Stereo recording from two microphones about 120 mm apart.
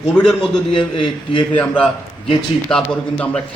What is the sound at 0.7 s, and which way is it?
Speech, 45° left (ahead or behind).